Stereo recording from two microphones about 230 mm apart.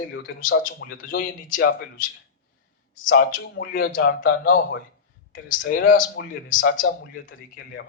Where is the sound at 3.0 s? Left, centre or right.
Left.